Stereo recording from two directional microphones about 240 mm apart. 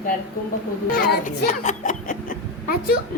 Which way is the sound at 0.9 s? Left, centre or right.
Left.